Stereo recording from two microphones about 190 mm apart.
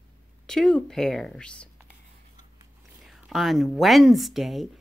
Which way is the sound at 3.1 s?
Centre (ahead or behind).